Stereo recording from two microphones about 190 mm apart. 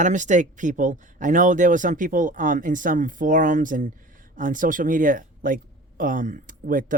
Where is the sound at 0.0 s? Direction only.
40° right (ahead or behind).